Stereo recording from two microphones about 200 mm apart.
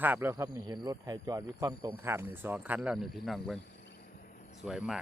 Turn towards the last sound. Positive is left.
turn(degrees=0)  # may be behind; listen again after turning